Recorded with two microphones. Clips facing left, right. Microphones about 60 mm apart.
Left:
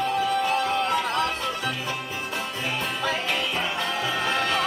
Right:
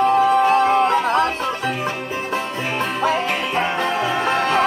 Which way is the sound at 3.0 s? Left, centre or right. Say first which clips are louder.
Right 6 dB; right.